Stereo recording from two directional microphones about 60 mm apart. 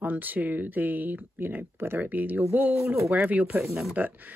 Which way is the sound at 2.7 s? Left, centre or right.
Right.